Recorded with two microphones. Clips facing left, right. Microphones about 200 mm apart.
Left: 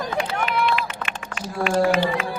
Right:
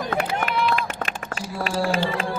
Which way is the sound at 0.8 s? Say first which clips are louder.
Right 1 dB; 40° right (ahead or behind).